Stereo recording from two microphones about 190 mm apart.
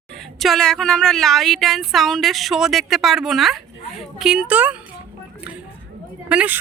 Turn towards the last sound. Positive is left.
turn(degrees=-5)  # may be behind; listen again after turning